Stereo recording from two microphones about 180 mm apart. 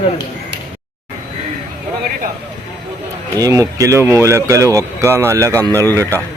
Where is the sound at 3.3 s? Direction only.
20° right (ahead or behind).